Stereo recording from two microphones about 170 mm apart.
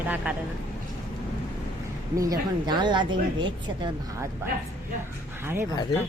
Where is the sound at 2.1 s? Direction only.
20° right (ahead or behind).